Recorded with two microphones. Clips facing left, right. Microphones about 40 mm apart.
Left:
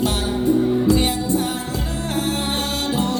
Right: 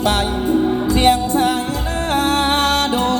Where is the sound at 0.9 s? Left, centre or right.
Right.